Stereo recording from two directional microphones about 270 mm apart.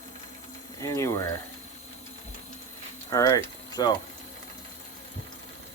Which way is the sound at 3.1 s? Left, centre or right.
Centre.